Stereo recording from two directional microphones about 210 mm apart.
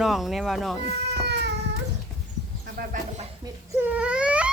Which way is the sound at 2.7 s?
40° right (ahead or behind).